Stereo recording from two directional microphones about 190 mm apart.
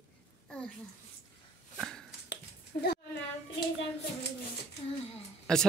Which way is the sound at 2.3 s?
60° left (ahead or behind).